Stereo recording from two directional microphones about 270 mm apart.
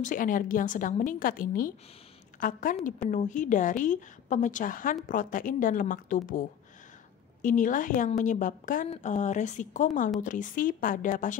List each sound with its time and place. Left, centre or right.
0.0 s a woman's voice: left
7.4 s a woman's voice: left